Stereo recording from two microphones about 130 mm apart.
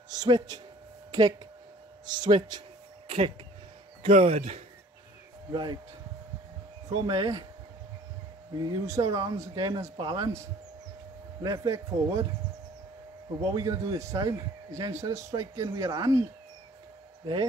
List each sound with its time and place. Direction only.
0.1 s speech: 30° right (ahead or behind)
2.0 s speech: 35° right (ahead or behind)
3.1 s a man's voice: 45° right (ahead or behind)
5.5 s speech: 35° right (ahead or behind)
6.9 s speech: 30° right (ahead or behind)
8.5 s speech: 30° right (ahead or behind)
13.4 s speech: 30° right (ahead or behind)